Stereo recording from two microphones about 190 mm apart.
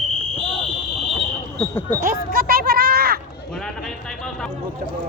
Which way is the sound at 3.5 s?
Centre (ahead or behind).